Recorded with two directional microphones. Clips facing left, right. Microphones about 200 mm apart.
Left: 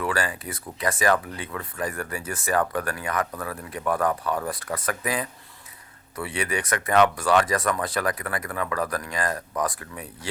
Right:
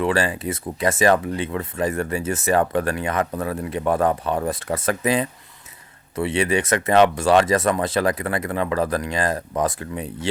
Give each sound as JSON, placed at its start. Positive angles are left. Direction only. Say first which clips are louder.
{"t": 0.0, "sound": "speech", "louder": "right 6 dB", "side_deg": -25}